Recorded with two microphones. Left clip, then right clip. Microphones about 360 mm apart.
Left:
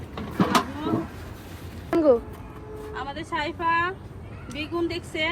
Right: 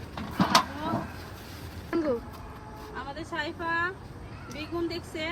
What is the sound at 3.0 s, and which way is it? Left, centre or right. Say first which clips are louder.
Speech: left 5 dB; centre.